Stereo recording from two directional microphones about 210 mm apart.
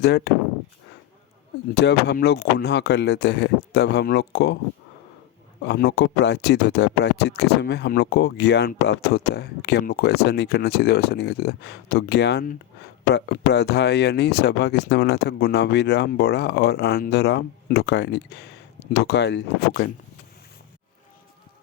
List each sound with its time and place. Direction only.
0.0 s speech: 50° left (ahead or behind)
1.7 s speech: 55° left (ahead or behind)
5.6 s speech: 50° left (ahead or behind)